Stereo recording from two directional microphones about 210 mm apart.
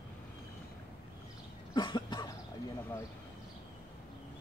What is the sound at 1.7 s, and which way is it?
Cough, 20° left (ahead or behind).